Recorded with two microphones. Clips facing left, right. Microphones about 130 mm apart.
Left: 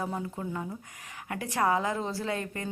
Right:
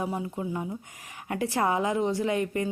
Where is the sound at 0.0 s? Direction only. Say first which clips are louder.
Right 3 dB; 15° right (ahead or behind).